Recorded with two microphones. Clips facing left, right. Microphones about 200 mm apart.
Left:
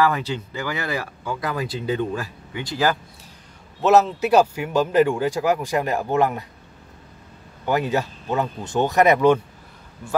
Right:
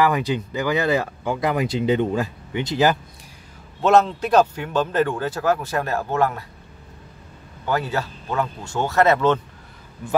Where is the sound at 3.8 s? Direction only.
5° left (ahead or behind).